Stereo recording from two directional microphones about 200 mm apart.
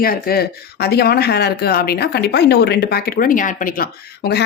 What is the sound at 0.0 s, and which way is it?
Speech, 50° left (ahead or behind).